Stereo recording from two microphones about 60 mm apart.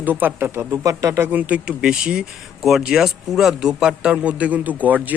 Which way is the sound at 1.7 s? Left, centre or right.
Centre.